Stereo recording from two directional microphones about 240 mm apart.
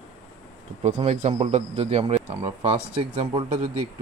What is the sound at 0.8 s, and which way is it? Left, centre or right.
Speech, right.